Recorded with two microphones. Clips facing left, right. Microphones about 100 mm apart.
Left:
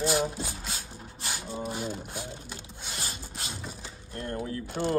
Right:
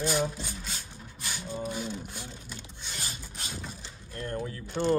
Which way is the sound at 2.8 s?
45° left (ahead or behind).